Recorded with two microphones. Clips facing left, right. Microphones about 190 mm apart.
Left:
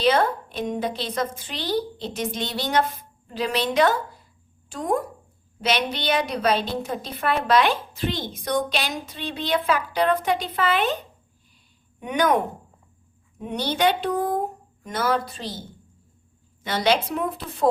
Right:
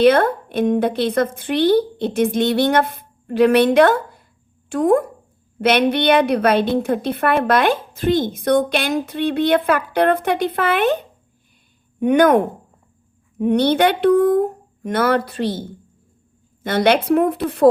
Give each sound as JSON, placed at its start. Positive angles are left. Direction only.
{"t": 0.0, "sound": "a woman's voice", "side_deg": -60}
{"t": 16.6, "sound": "a woman's voice", "side_deg": -60}